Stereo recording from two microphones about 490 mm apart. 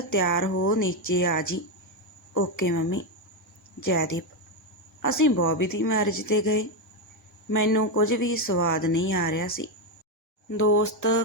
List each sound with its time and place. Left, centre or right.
0.0 s speech: left
10.6 s speech: left